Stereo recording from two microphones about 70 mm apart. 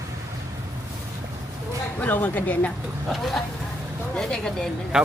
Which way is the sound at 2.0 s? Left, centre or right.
Left.